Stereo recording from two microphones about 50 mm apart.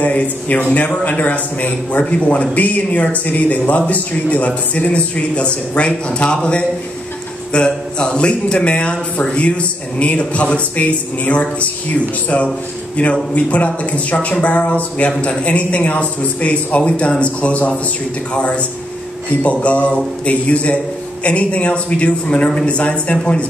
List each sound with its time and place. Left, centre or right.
0.0 s a man's voice: left
12.9 s speech: left
19.6 s speech: left